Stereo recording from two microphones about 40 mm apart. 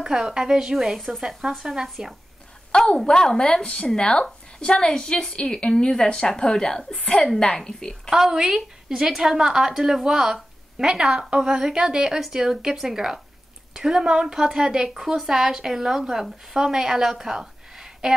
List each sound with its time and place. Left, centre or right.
0.0 s a woman's voice: centre
0.9 s speech: centre
1.6 s a woman's voice: centre
2.7 s a woman's voice: left
6.9 s a woman's voice: left
8.1 s a woman's voice: centre